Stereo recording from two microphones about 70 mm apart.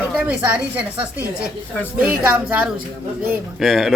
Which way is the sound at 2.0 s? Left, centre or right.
Right.